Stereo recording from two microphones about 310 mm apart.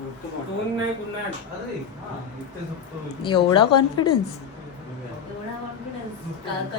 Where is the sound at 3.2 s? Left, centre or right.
Centre.